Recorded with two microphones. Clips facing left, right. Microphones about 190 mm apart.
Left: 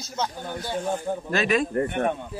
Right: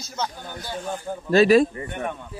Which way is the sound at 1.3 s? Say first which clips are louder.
Right 9 dB; 35° right (ahead or behind).